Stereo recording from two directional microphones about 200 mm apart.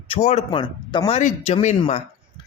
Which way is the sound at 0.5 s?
20° left (ahead or behind).